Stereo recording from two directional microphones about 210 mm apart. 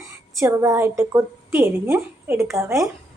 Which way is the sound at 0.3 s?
15° right (ahead or behind).